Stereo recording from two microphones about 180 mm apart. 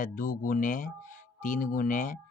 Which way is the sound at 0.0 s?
50° left (ahead or behind).